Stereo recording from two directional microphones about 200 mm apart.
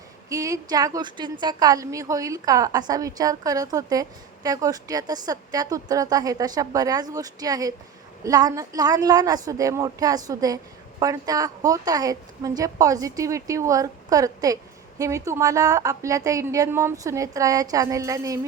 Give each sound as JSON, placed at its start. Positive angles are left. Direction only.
{"t": 0.3, "sound": "a woman's voice", "side_deg": -15}